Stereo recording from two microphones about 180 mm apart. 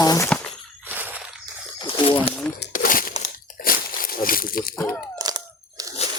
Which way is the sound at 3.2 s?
55° left (ahead or behind).